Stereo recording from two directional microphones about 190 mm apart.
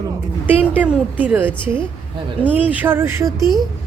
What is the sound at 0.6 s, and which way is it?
A woman's voice, 5° right (ahead or behind).